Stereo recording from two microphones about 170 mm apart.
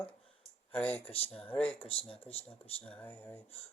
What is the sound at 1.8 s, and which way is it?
Speech, 35° left (ahead or behind).